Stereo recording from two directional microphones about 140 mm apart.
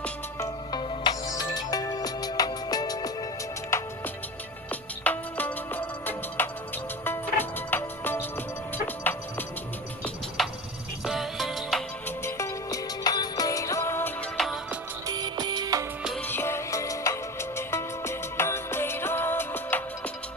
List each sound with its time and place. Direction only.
0.4 s music: 30° left (ahead or behind)
5.0 s music: 10° left (ahead or behind)
10.0 s music: centre (ahead or behind)
12.2 s music: 20° left (ahead or behind)
14.3 s music: centre (ahead or behind)
15.0 s music: 30° right (ahead or behind)
16.2 s music: 15° left (ahead or behind)